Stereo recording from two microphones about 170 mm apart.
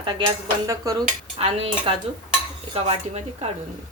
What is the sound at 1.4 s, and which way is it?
Speech, 35° right (ahead or behind).